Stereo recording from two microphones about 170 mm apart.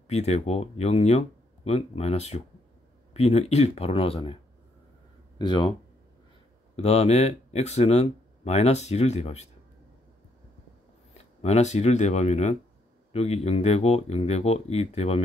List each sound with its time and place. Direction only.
0.1 s speech: 40° left (ahead or behind)
5.4 s speech: 25° left (ahead or behind)
6.8 s speech: 40° left (ahead or behind)
11.1 s speech: 40° left (ahead or behind)